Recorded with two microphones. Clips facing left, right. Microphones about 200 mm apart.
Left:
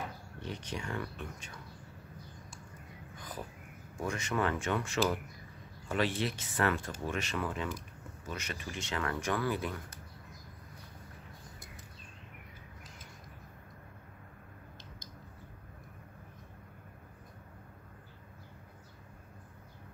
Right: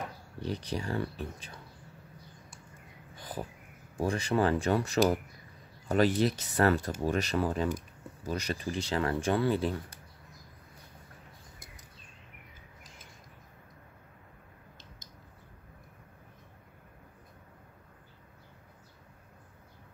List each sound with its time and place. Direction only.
0.4 s speech: 35° right (ahead or behind)
3.2 s a sound: 30° right (ahead or behind)
4.0 s speech: 35° right (ahead or behind)